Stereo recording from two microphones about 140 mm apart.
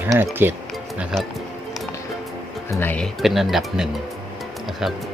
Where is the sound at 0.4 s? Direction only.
15° right (ahead or behind).